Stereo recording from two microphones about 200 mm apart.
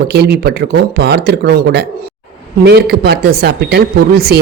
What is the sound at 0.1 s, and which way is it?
Speech, 55° right (ahead or behind).